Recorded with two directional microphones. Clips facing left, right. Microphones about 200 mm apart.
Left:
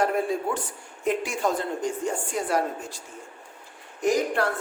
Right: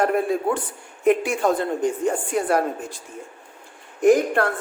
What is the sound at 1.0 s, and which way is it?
A woman's voice, 60° right (ahead or behind).